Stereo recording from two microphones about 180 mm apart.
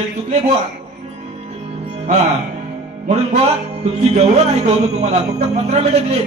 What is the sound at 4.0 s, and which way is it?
Speech, 35° right (ahead or behind).